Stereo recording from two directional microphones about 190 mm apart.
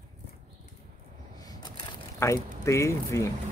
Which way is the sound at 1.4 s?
20° left (ahead or behind).